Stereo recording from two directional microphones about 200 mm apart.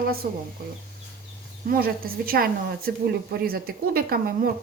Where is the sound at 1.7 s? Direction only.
45° right (ahead or behind).